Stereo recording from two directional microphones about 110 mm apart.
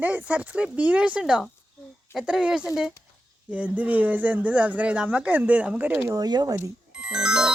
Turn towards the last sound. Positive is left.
turn(degrees=-5)  # may be behind; listen again after turning